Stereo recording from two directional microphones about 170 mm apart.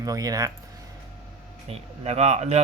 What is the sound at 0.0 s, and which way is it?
Speech, 20° right (ahead or behind).